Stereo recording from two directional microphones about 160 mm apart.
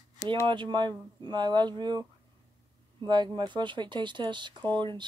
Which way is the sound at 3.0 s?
30° right (ahead or behind).